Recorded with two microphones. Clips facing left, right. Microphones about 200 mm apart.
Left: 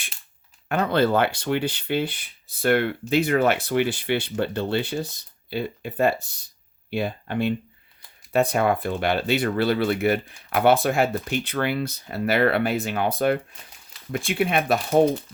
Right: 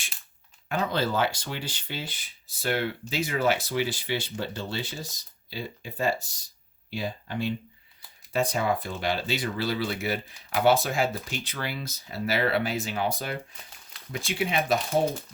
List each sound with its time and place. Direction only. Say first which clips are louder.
0.7 s speech: left 7 dB; 60° left (ahead or behind)